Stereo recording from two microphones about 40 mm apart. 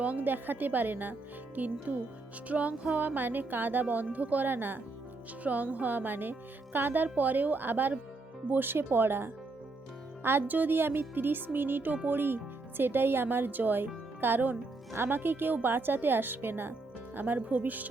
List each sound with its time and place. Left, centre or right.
0.0 s speech: right
3.2 s speech: right
4.4 s speech: right
5.4 s speech: right
10.4 s speech: right
17.2 s speech: right